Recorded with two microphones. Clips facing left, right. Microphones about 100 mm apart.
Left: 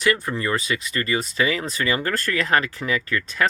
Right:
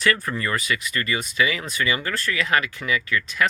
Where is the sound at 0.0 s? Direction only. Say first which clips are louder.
Left 1 dB; 20° left (ahead or behind).